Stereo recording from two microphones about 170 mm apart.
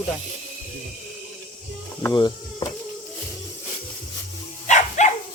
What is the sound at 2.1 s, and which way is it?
Mechanisms, 25° left (ahead or behind).